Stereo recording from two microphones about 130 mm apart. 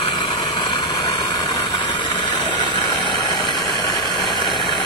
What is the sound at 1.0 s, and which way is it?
Vehicle, 30° left (ahead or behind).